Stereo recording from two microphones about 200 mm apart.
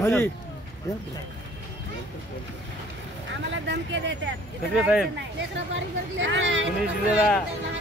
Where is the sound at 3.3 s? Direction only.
65° right (ahead or behind).